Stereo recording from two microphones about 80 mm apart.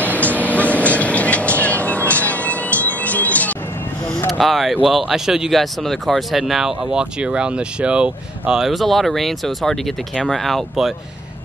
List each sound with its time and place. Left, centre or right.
0.0 s vehicle: centre
4.3 s speech: centre